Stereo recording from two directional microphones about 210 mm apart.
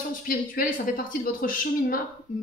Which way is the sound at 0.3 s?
40° left (ahead or behind).